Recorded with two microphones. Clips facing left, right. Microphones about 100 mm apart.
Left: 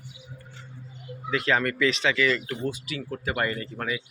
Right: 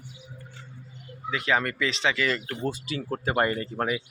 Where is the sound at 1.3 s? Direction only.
15° right (ahead or behind).